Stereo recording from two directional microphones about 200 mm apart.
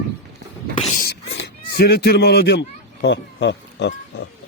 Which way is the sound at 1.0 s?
60° left (ahead or behind).